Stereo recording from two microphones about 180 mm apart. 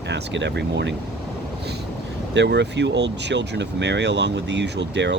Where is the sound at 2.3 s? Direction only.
75° right (ahead or behind).